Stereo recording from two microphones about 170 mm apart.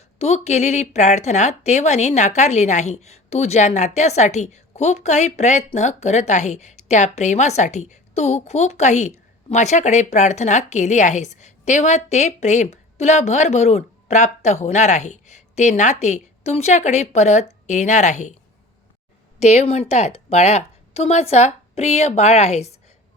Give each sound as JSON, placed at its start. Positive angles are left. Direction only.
{"t": 0.2, "sound": "speech", "side_deg": 40}
{"t": 19.4, "sound": "a woman's voice", "side_deg": 40}